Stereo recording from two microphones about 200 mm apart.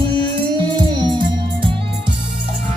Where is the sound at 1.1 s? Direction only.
25° right (ahead or behind).